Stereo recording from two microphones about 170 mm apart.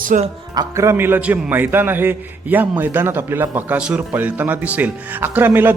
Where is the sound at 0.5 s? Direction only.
15° right (ahead or behind).